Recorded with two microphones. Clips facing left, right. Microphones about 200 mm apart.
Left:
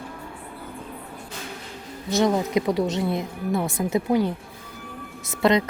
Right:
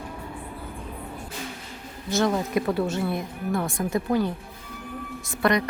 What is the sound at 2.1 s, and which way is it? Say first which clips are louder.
A woman's voice: left 2 dB; 20° left (ahead or behind).